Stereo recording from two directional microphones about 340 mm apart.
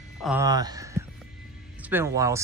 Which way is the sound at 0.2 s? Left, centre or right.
Centre.